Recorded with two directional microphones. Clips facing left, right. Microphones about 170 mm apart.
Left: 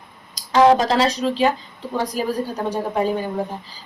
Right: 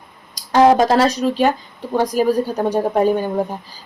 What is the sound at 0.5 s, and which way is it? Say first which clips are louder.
Speech: right 2 dB; 50° right (ahead or behind).